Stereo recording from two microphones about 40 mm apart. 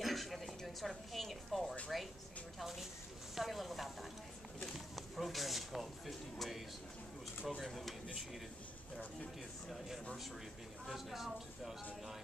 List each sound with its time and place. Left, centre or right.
0.0 s a sound: centre
0.7 s a woman's voice: centre
7.6 s speech: centre
10.9 s speech: centre